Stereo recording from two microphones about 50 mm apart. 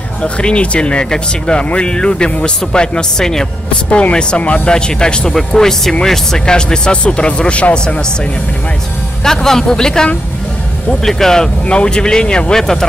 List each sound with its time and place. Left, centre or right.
0.2 s speech: centre
4.4 s speech: left
4.6 s speech: centre
9.2 s speech: centre
11.1 s speech: centre
11.6 s speech: centre